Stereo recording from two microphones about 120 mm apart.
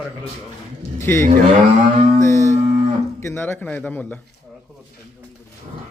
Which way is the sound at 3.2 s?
20° left (ahead or behind).